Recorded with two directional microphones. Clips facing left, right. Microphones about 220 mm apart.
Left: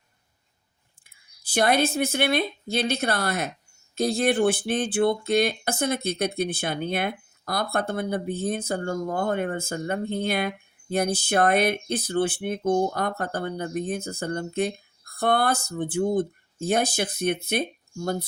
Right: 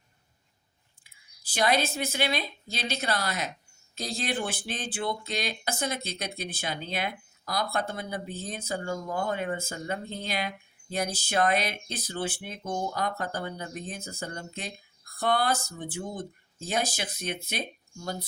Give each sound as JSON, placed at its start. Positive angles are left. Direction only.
{"t": 1.5, "sound": "speech", "side_deg": 55}